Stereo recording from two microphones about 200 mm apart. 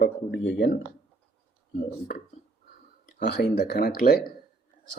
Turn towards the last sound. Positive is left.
turn(degrees=50)  # may be behind; listen again after turning